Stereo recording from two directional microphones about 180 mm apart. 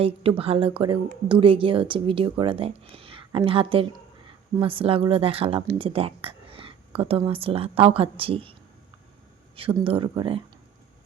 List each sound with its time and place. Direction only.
0.0 s speech: 30° right (ahead or behind)
9.6 s speech: 30° right (ahead or behind)